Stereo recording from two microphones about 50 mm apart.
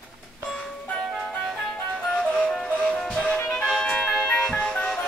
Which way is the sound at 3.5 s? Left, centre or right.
Centre.